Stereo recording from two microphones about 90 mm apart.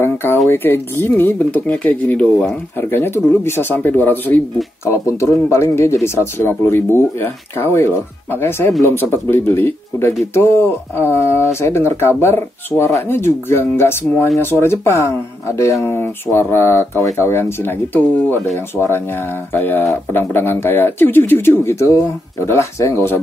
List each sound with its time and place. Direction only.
0.0 s a sound: 25° left (ahead or behind)
0.5 s speech: 25° left (ahead or behind)
4.8 s speech: 30° left (ahead or behind)